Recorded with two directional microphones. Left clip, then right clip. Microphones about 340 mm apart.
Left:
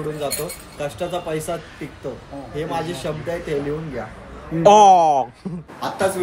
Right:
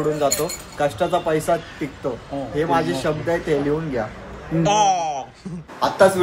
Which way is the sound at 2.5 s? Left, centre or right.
Centre.